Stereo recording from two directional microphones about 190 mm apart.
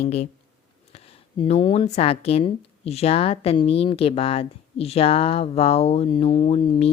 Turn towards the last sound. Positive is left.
turn(degrees=30)  # may be behind; listen again after turning